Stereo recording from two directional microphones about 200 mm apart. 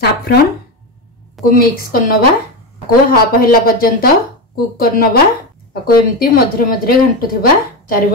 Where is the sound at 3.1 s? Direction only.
45° left (ahead or behind).